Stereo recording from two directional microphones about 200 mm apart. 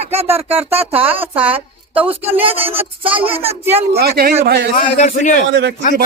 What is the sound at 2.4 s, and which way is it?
Speech, 30° right (ahead or behind).